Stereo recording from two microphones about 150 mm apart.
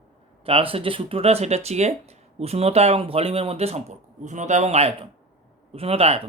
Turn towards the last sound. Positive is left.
turn(degrees=-40)  # may be behind; listen again after turning